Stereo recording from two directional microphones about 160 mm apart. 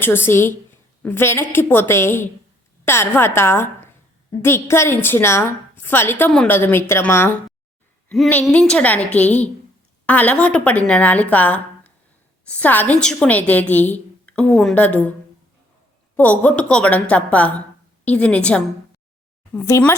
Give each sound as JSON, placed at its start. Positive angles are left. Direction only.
{"t": 0.0, "sound": "a woman's voice", "side_deg": 15}
{"t": 16.1, "sound": "a woman's voice", "side_deg": 10}